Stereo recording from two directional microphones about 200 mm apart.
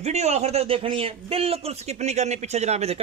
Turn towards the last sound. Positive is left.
turn(degrees=-30)  # may be behind; listen again after turning